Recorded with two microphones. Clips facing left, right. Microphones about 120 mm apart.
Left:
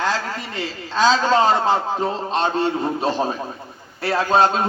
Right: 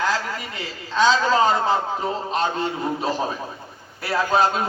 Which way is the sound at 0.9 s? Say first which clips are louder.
Left 1 dB; 35° left (ahead or behind).